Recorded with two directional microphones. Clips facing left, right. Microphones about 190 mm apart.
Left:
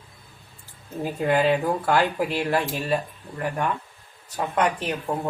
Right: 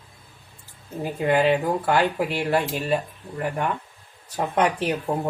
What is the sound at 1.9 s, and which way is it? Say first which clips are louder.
Speech: even; 15° right (ahead or behind).